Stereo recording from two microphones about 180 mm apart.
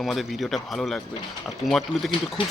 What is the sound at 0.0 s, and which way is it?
Speech, centre (ahead or behind).